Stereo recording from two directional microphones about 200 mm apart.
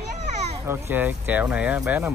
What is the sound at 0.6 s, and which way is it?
Speech, 10° right (ahead or behind).